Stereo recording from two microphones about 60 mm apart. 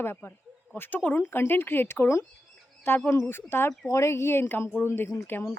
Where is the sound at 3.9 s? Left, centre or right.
Left.